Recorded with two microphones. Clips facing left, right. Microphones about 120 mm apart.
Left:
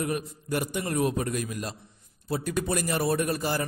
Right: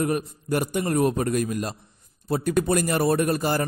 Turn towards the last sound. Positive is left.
turn(degrees=-50)  # may be behind; listen again after turning